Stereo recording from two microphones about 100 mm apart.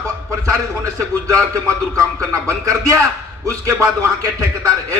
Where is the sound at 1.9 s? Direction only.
30° right (ahead or behind).